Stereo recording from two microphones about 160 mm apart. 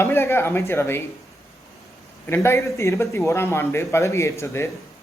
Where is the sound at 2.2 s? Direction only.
15° left (ahead or behind).